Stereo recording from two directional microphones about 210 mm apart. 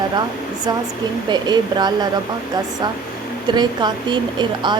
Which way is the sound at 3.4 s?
20° right (ahead or behind).